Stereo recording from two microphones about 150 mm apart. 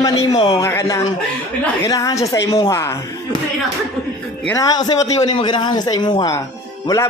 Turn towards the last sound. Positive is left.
turn(degrees=30)  # may be behind; listen again after turning